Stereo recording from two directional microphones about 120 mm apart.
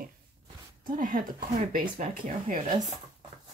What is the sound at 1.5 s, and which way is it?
Speech, 85° right.